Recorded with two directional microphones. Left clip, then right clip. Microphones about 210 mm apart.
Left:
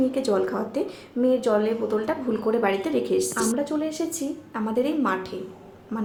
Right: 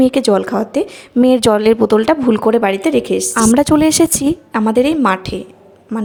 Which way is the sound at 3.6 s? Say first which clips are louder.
Right 15 dB; 50° right (ahead or behind).